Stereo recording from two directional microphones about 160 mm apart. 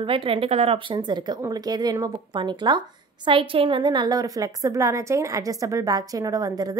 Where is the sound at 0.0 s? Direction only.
35° right (ahead or behind).